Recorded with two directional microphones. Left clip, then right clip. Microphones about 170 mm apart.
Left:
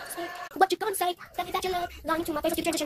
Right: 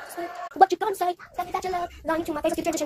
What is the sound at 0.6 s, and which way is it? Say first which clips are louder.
Speech: right 5 dB; 15° left (ahead or behind).